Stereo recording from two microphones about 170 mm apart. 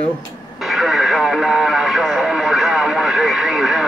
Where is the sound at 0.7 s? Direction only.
Centre (ahead or behind).